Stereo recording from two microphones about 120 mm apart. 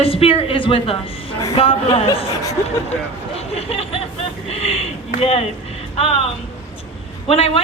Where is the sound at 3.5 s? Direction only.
50° left (ahead or behind).